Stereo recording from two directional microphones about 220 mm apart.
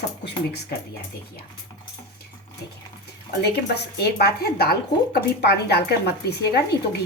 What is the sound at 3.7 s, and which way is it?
A woman's voice, 50° left (ahead or behind).